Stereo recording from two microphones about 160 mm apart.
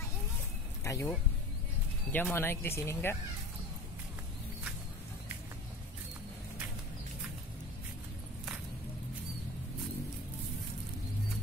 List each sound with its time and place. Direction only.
0.8 s speech: 15° left (ahead or behind)
2.1 s speech: 10° left (ahead or behind)